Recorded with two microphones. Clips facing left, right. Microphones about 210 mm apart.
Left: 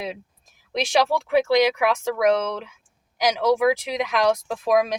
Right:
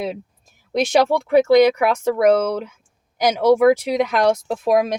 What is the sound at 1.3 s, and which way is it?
Speech, 45° right (ahead or behind).